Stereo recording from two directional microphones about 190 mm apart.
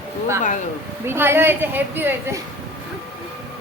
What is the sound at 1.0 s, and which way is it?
A woman's voice, 10° right (ahead or behind).